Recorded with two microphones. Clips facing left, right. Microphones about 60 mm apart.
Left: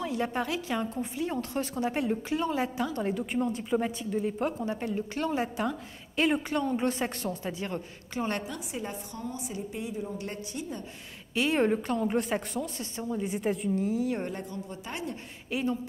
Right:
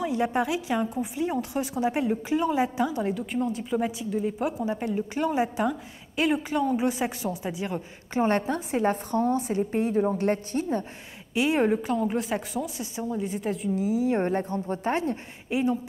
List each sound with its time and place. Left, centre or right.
0.0 s a woman's voice: centre
3.0 s a woman's voice: centre
5.6 s a woman's voice: centre
8.1 s a woman's voice: right
11.3 s a woman's voice: centre
13.2 s a woman's voice: centre
14.0 s speech: right
15.5 s a woman's voice: centre